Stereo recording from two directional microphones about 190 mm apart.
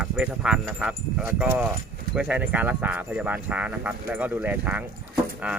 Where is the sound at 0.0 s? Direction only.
5° right (ahead or behind).